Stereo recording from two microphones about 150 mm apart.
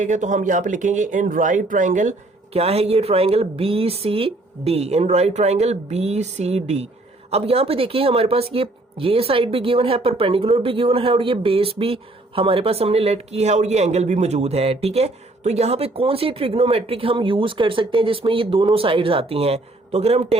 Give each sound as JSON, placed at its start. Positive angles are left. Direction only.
{"t": 0.0, "sound": "speech", "side_deg": -55}